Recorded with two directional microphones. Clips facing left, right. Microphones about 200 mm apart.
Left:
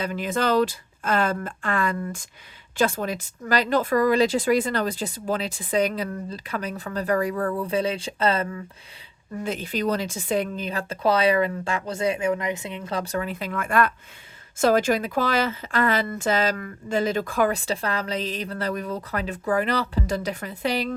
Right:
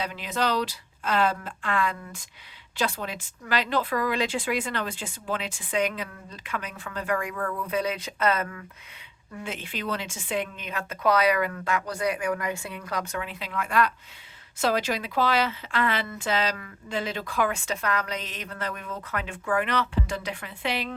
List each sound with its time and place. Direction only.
0.0 s a woman's voice: 45° left (ahead or behind); by 8.6 s 30° left (ahead or behind)
9.4 s a woman's voice: 40° left (ahead or behind)